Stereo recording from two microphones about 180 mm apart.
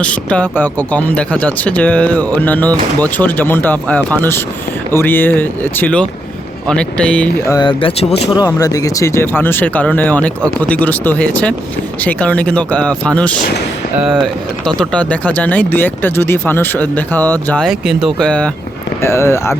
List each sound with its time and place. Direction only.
0.0 s speech: 5° left (ahead or behind)
7.4 s speech: 20° left (ahead or behind)
8.4 s speech: 20° left (ahead or behind)